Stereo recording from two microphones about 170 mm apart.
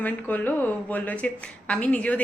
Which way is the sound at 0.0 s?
10° left (ahead or behind).